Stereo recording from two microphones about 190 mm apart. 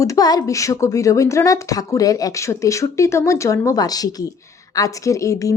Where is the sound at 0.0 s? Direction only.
20° left (ahead or behind).